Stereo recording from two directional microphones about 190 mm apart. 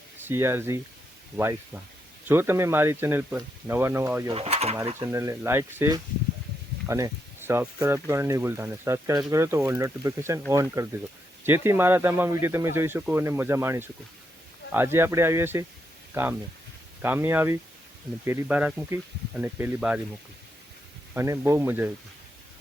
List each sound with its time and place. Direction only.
0.3 s speech: 10° right (ahead or behind)
4.4 s speech: 35° right (ahead or behind)
4.9 s speech: 15° right (ahead or behind)
17.0 s speech: 10° right (ahead or behind)
21.2 s speech: 15° right (ahead or behind)